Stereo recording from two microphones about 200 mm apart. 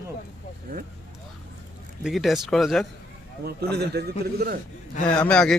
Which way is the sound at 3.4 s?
55° right (ahead or behind).